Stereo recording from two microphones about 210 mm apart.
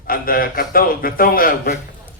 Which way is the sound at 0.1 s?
45° left (ahead or behind).